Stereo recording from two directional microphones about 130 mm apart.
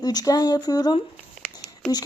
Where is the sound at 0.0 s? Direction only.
30° left (ahead or behind).